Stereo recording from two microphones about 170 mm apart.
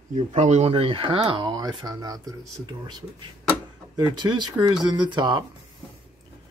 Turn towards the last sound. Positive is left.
turn(degrees=-25)  # may be behind; listen again after turning